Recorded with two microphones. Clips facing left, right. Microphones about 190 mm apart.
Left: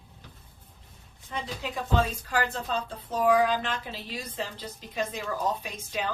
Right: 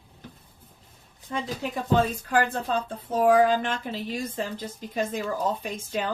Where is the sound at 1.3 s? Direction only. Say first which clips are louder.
Right 4 dB; 50° right (ahead or behind).